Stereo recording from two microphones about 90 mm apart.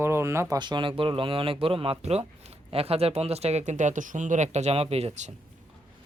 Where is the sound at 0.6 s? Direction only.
60° right (ahead or behind); by 1.5 s 80° right.